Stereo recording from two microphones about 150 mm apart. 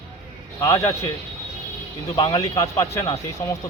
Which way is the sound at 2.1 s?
25° left (ahead or behind).